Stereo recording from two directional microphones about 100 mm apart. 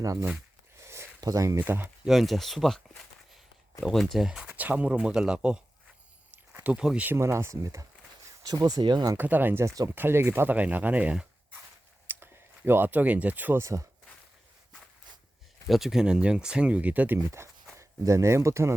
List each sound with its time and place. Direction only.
0.0 s speech: 35° right (ahead or behind)
0.8 s a sound: 30° right (ahead or behind)
1.2 s speech: 35° right (ahead or behind)
1.5 s speech: 20° right (ahead or behind)
2.0 s speech: centre (ahead or behind)
7.2 s speech: 25° right (ahead or behind); by 9.1 s 45° right (ahead or behind)
9.1 s speech: 20° right (ahead or behind)
13.6 s speech: 30° right (ahead or behind)
15.6 s speech: centre (ahead or behind)
17.4 s speech: 25° right (ahead or behind)